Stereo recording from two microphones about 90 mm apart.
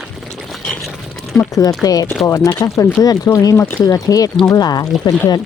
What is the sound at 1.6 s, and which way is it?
Speech, 40° left (ahead or behind).